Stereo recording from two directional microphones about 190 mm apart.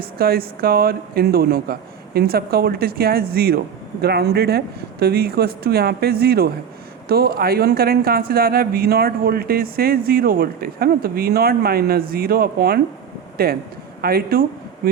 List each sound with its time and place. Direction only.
0.0 s speech: 55° right (ahead or behind)